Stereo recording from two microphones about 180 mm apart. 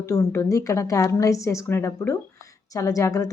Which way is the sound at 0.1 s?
15° left (ahead or behind).